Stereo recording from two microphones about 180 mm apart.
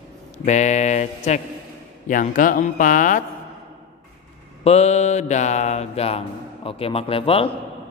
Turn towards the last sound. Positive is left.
turn(degrees=30)  # may be behind; listen again after turning